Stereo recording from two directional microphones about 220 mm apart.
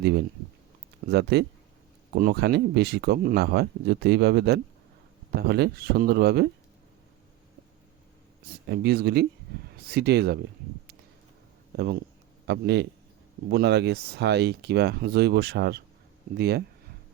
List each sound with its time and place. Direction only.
1.1 s speech: 50° right (ahead or behind)
8.6 s speech: 50° right (ahead or behind)
12.5 s speech: 50° right (ahead or behind)